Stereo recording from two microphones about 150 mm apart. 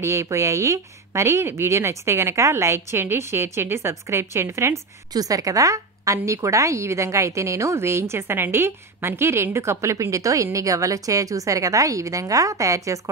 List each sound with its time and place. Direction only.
0.0 s speech: 20° right (ahead or behind)